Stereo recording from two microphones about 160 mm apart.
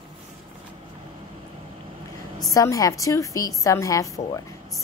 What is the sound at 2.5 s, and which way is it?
A woman's voice, 20° left (ahead or behind).